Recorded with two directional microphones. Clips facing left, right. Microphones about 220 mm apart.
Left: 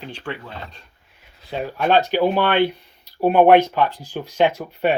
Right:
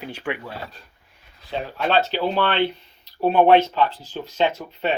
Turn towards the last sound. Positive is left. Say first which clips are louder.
# left 4 dB
turn(degrees=10)  # may be behind; listen again after turning